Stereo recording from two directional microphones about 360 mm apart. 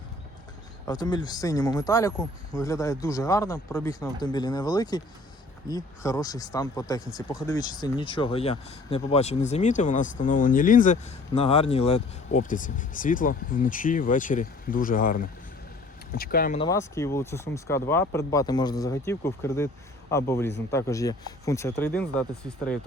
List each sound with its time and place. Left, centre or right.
0.9 s speech: centre
16.6 s speech: centre